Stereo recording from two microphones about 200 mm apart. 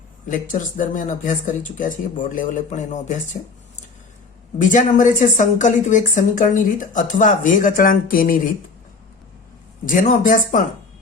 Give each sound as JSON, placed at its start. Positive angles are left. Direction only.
{"t": 0.3, "sound": "a woman's voice", "side_deg": 40}
{"t": 4.5, "sound": "a woman's voice", "side_deg": 40}
{"t": 9.8, "sound": "a woman's voice", "side_deg": 40}